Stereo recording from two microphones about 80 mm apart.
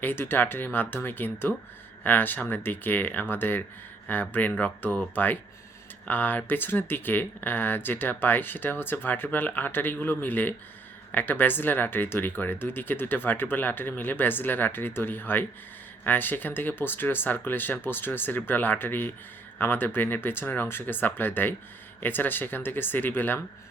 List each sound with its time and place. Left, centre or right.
0.0 s speech: left